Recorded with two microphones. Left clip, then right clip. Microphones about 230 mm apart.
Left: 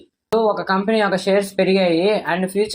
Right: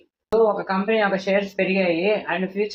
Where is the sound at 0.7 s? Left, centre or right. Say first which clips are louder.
Left 3 dB; left.